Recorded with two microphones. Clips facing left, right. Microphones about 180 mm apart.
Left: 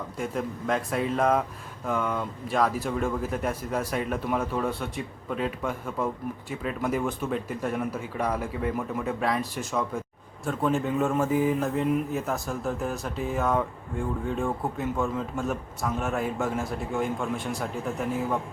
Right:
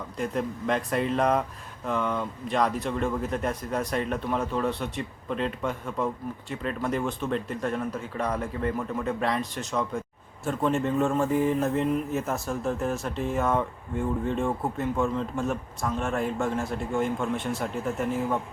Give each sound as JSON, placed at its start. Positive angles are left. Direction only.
{"t": 0.2, "sound": "speech", "side_deg": 0}